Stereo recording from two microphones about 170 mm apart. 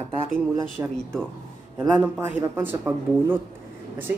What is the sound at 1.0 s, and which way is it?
Speech, 5° left (ahead or behind).